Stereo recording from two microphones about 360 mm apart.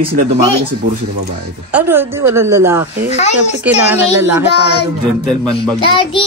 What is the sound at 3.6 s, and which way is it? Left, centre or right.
Speech, centre.